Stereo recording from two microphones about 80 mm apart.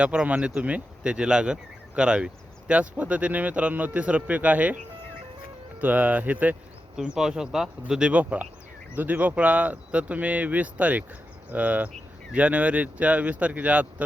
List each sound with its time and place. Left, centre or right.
0.0 s speech: centre
5.8 s speech: centre
6.9 s speech: centre